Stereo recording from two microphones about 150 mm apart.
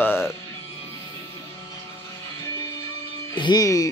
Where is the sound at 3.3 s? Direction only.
30° left (ahead or behind).